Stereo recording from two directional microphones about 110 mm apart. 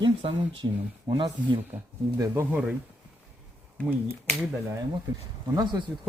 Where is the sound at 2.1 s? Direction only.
30° right (ahead or behind).